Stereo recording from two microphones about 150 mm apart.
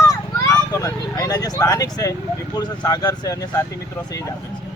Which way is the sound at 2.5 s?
25° left (ahead or behind).